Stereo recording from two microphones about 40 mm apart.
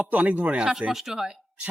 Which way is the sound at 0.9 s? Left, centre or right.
Centre.